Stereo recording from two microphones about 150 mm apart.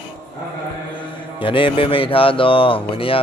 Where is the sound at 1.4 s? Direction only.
35° left (ahead or behind).